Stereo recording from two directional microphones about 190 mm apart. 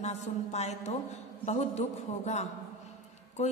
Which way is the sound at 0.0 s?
35° left (ahead or behind).